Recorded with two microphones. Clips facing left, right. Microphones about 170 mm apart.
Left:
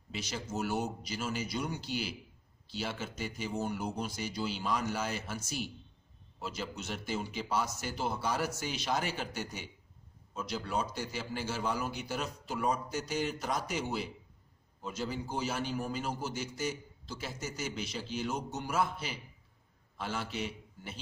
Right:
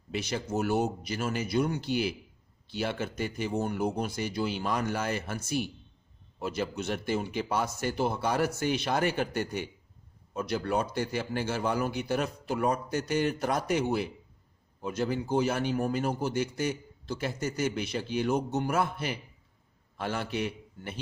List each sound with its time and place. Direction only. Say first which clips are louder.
0.1 s a man's voice: right 7 dB; 60° right (ahead or behind)